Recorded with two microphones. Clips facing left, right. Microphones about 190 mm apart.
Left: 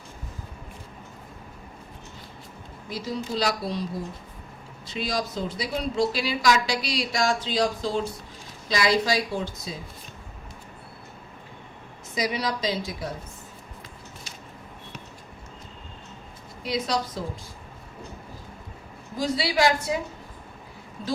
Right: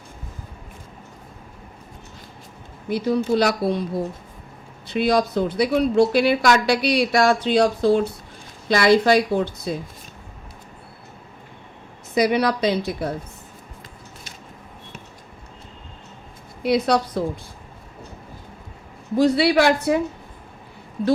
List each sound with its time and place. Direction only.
2.9 s speech: 60° right (ahead or behind)
12.1 s speech: 60° right (ahead or behind)
16.6 s speech: 60° right (ahead or behind)
19.1 s speech: 65° right (ahead or behind)